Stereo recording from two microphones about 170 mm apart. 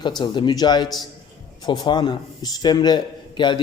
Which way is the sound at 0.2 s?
25° left (ahead or behind).